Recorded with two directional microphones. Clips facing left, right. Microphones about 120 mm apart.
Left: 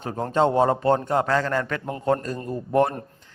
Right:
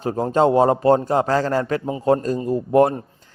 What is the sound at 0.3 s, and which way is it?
Speech, 40° right (ahead or behind).